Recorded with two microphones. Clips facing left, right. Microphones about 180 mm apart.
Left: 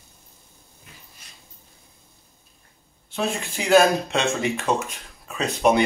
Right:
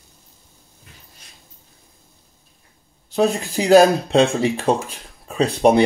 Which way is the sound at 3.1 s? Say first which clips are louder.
Right 8 dB; 35° right (ahead or behind).